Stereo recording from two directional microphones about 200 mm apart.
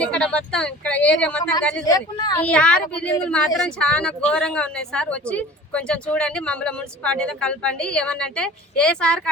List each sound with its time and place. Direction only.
0.0 s speech: 5° left (ahead or behind)
1.8 s speech: 20° left (ahead or behind)
2.3 s speech: 5° left (ahead or behind)